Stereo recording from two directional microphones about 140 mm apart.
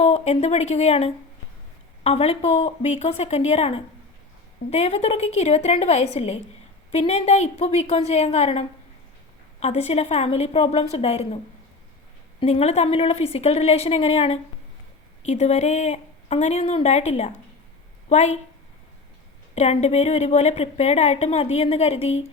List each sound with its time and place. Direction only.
0.0 s a woman's voice: 50° left (ahead or behind)
12.4 s a woman's voice: 50° left (ahead or behind)
19.5 s a woman's voice: 50° left (ahead or behind)